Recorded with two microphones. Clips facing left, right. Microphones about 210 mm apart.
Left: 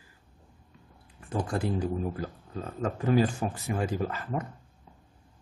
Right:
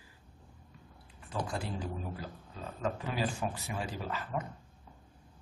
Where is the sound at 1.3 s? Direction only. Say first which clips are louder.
Left 6 dB; 50° left (ahead or behind).